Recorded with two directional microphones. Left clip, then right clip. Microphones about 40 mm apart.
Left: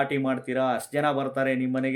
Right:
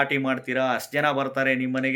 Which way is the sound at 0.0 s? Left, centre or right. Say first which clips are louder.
Right 2 dB; left.